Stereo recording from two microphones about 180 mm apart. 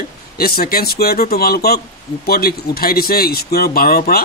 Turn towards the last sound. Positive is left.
turn(degrees=60)  # may be behind; listen again after turning